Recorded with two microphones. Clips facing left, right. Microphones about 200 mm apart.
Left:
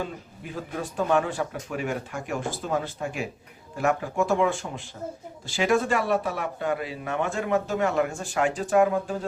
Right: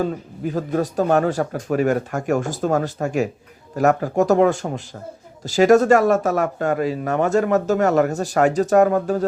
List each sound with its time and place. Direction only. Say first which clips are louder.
0.0 s speech: right 11 dB; 40° right (ahead or behind)